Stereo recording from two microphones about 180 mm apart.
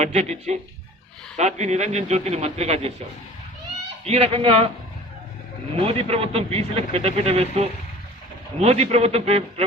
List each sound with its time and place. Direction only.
0.0 s speech: 40° right (ahead or behind)
4.0 s speech: 35° right (ahead or behind)
5.8 s speech: 30° right (ahead or behind)